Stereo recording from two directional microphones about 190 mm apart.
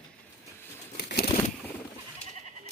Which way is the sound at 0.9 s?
55° left (ahead or behind).